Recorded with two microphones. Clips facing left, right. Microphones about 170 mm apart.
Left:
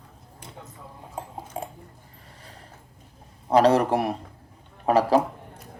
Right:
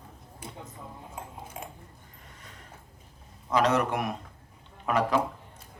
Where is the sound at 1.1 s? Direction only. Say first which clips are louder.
Left 10 dB; 30° left (ahead or behind).